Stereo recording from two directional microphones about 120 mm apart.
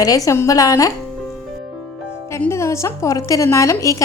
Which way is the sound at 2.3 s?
25° left (ahead or behind).